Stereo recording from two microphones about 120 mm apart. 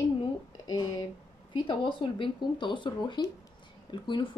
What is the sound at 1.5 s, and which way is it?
Speech, 45° left (ahead or behind).